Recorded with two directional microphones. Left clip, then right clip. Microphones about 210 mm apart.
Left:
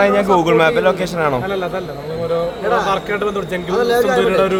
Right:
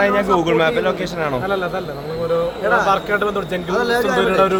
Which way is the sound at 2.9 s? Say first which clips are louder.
Right 1 dB; 15° left (ahead or behind).